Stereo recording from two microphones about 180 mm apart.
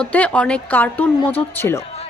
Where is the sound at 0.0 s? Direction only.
10° left (ahead or behind).